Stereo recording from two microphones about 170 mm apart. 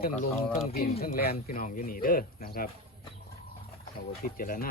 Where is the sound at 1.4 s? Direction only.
50° left (ahead or behind).